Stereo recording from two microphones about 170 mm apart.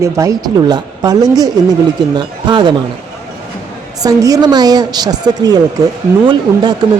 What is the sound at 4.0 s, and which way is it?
Speech, 20° right (ahead or behind).